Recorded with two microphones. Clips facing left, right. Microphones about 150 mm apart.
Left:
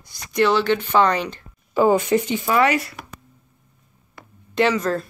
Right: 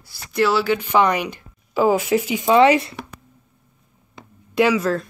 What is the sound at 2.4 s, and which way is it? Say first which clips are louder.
Speech: right 5 dB; 25° right (ahead or behind).